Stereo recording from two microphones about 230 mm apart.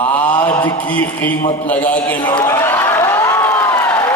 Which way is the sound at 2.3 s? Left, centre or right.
Centre.